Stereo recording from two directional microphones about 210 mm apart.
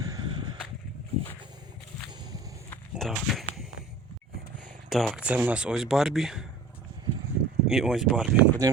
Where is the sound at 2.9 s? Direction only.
Centre (ahead or behind).